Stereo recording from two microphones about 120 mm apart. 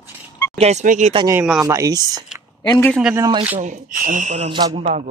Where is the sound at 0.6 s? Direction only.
75° right (ahead or behind).